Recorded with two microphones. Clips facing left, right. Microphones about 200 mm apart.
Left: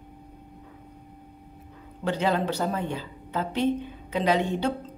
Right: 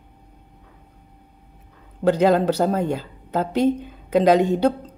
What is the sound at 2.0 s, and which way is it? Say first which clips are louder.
A woman's voice: right 9 dB; 40° right (ahead or behind).